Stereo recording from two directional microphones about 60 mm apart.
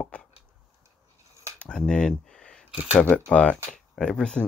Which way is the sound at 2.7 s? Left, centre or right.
Centre.